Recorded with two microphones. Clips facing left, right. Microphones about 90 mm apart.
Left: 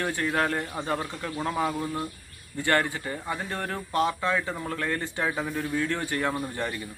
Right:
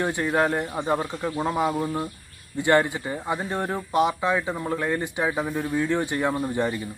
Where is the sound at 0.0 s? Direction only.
20° right (ahead or behind).